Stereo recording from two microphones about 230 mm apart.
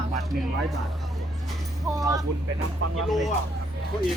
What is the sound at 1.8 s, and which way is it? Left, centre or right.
Speech, centre.